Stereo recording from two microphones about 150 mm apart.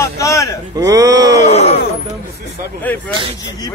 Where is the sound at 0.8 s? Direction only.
20° right (ahead or behind).